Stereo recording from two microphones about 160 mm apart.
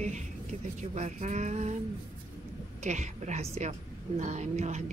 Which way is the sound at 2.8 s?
50° right (ahead or behind).